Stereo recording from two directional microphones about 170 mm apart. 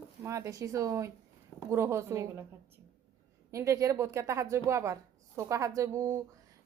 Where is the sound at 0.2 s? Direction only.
15° right (ahead or behind).